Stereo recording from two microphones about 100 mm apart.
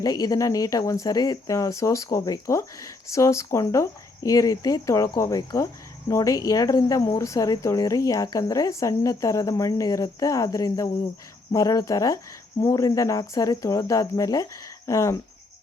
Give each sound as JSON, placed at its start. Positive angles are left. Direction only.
{"t": 0.0, "sound": "speech", "side_deg": 35}
{"t": 5.4, "sound": "speech", "side_deg": 40}